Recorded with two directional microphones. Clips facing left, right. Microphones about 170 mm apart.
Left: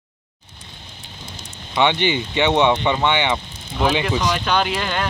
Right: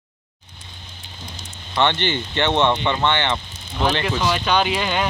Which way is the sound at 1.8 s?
10° left (ahead or behind).